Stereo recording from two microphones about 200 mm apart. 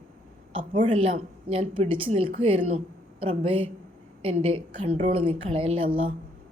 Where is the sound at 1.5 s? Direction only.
30° right (ahead or behind).